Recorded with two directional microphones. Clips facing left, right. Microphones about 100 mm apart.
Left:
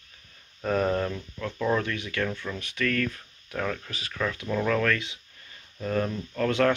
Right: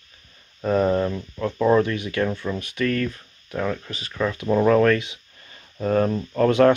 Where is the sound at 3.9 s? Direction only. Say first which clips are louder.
Right 3 dB; 5° left (ahead or behind).